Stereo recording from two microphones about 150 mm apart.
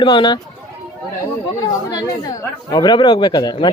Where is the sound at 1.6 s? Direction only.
25° left (ahead or behind).